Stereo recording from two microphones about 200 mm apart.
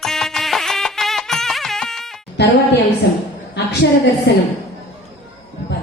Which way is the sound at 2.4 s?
55° left (ahead or behind).